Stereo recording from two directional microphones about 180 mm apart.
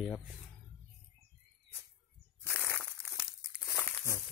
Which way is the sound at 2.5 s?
10° left (ahead or behind).